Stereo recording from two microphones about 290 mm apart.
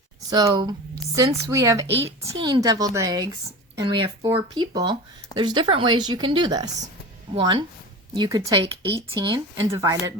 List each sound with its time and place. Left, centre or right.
0.3 s speech: centre